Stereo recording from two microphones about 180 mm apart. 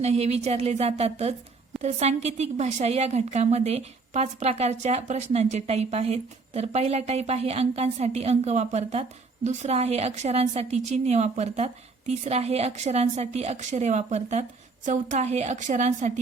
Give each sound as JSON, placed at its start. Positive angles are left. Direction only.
{"t": 0.0, "sound": "a woman's voice", "side_deg": -35}